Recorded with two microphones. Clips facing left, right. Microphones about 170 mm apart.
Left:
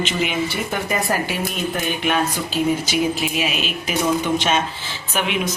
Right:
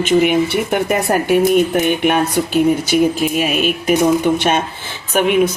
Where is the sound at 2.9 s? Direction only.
50° right (ahead or behind).